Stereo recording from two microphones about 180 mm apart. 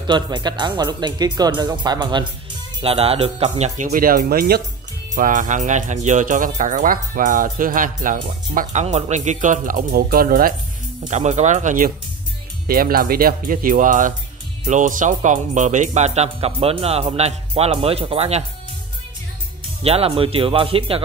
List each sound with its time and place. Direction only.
0.0 s speech: 25° right (ahead or behind); by 10.5 s 50° right (ahead or behind)
11.1 s speech: 40° right (ahead or behind)
19.8 s speech: 35° right (ahead or behind)